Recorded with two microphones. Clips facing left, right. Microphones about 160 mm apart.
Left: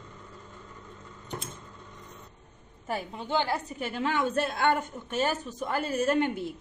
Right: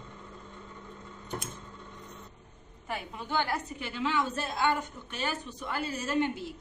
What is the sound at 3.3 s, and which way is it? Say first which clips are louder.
Speech: left 3 dB; 30° left (ahead or behind).